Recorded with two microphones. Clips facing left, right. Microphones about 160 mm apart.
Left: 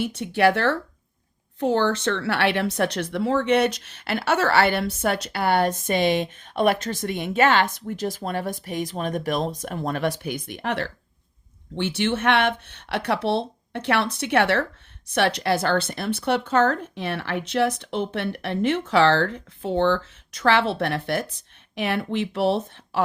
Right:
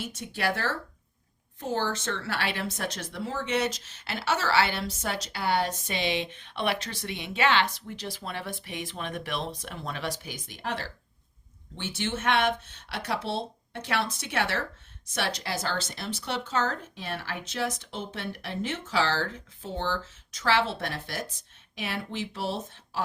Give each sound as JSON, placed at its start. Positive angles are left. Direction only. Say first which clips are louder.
{"t": 0.0, "sound": "speech", "louder": "left 11 dB", "side_deg": 65}